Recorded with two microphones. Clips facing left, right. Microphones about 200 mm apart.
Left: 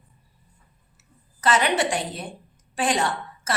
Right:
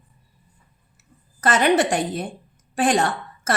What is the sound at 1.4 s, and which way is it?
A woman's voice, 50° right (ahead or behind).